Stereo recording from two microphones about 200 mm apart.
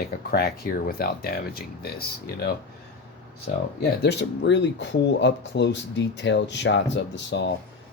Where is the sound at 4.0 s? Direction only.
60° left (ahead or behind).